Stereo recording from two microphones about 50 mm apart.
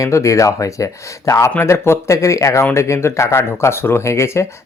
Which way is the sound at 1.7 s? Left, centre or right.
Left.